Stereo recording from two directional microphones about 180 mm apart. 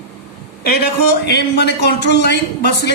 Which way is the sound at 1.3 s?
65° left (ahead or behind).